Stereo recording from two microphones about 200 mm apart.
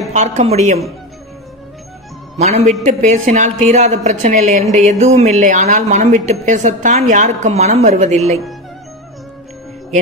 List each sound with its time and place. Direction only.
0.1 s a woman's voice: 35° right (ahead or behind)
2.3 s a woman's voice: 35° right (ahead or behind)